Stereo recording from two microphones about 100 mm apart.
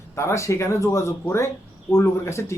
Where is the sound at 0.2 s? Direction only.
30° left (ahead or behind).